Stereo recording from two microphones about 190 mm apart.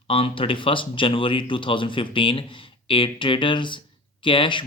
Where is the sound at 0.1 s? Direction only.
30° left (ahead or behind).